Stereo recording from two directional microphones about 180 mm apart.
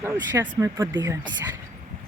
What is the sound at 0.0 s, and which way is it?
Speech, 15° right (ahead or behind).